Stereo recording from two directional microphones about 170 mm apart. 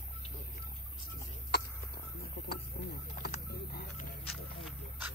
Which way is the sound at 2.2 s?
70° left (ahead or behind).